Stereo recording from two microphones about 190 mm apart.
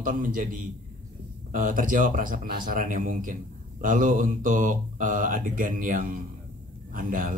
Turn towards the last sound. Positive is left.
turn(degrees=-45)  # may be behind; listen again after turning